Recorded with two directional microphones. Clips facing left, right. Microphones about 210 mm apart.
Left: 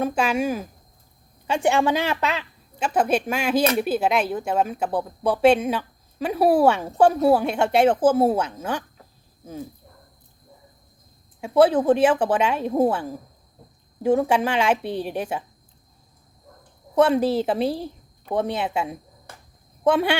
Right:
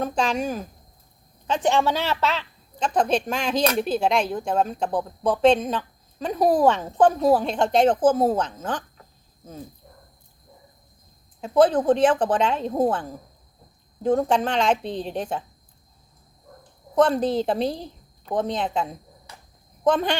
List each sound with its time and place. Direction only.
0.0 s a woman's voice: 10° left (ahead or behind)
11.3 s a woman's voice: 10° left (ahead or behind)
16.9 s a woman's voice: 10° left (ahead or behind)
19.3 s cricket: 50° left (ahead or behind)
19.8 s speech: 10° left (ahead or behind)